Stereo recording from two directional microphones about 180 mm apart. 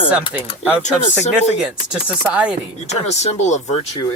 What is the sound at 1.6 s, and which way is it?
Speech, 5° right (ahead or behind).